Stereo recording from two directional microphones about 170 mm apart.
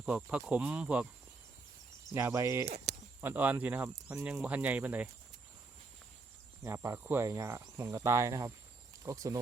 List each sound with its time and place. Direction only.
0.0 s speech: 5° right (ahead or behind)
2.1 s speech: 15° right (ahead or behind)
2.6 s speech: 40° right (ahead or behind)
3.2 s speech: 10° right (ahead or behind)
6.7 s speech: 15° right (ahead or behind)